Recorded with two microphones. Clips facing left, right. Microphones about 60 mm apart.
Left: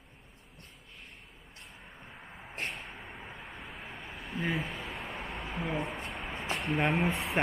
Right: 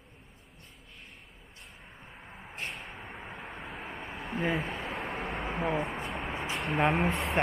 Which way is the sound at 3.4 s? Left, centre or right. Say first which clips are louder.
Right 4 dB; right.